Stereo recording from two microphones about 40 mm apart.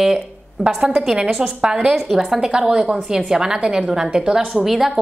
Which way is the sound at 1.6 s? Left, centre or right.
Centre.